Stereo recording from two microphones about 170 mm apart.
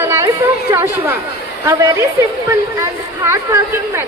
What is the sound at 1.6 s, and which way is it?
A woman's voice, 20° right (ahead or behind).